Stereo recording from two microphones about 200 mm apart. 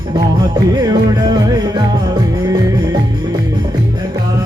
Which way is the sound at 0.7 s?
20° right (ahead or behind).